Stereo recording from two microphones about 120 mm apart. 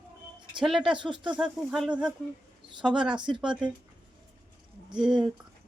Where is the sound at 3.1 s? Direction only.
40° right (ahead or behind).